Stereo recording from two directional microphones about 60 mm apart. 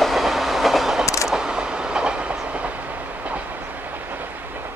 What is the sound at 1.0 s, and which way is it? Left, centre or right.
Train, left.